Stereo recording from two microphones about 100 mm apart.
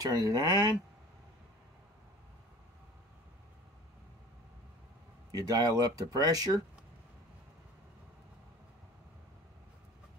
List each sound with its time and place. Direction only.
0.0 s speech: 40° right (ahead or behind)
5.3 s speech: 40° right (ahead or behind)